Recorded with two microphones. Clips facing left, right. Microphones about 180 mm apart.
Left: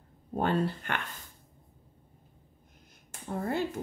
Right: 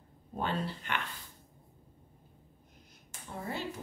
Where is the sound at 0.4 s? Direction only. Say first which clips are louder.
Left 6 dB; 50° left (ahead or behind).